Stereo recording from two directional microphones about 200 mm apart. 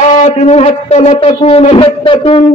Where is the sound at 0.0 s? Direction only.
35° left (ahead or behind).